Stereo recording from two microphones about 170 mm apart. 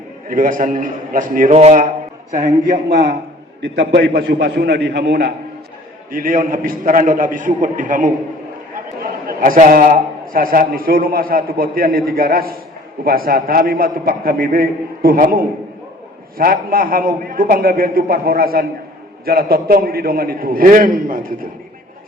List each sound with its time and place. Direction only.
0.3 s a man's voice: 55° right (ahead or behind)
2.9 s a man's voice: 75° right (ahead or behind)
6.1 s a man's voice: 55° right (ahead or behind)
9.4 s a man's voice: 50° right (ahead or behind)